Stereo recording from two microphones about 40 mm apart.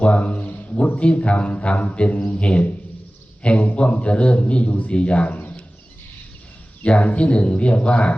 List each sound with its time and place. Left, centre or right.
0.0 s speech: left
6.8 s speech: left